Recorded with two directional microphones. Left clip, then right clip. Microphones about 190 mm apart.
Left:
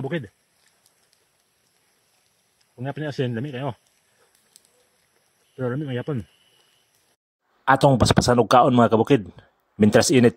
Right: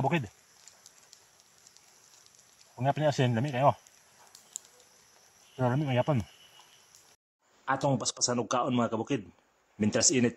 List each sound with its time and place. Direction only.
2.8 s speech: 20° right (ahead or behind)
5.6 s speech: 20° right (ahead or behind)
7.6 s speech: 45° left (ahead or behind)